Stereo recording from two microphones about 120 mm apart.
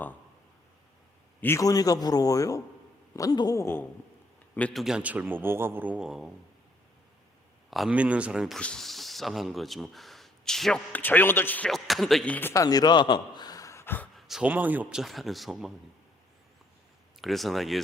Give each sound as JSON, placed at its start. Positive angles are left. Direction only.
{"t": 1.4, "sound": "a man's voice", "side_deg": 20}
{"t": 1.6, "sound": "a man's voice", "side_deg": 30}
{"t": 4.7, "sound": "a man's voice", "side_deg": -5}
{"t": 7.7, "sound": "a man's voice", "side_deg": 0}
{"t": 8.5, "sound": "speech", "side_deg": 5}
{"t": 11.7, "sound": "speech", "side_deg": 0}
{"t": 12.3, "sound": "speech", "side_deg": 20}
{"t": 12.6, "sound": "speech", "side_deg": 35}
{"t": 14.2, "sound": "speech", "side_deg": -5}
{"t": 17.2, "sound": "speech", "side_deg": 0}